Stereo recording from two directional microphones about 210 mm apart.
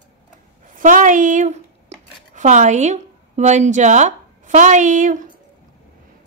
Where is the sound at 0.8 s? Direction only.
40° right (ahead or behind).